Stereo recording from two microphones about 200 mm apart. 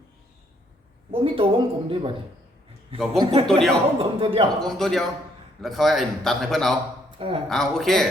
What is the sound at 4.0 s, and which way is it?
Speech, 25° right (ahead or behind).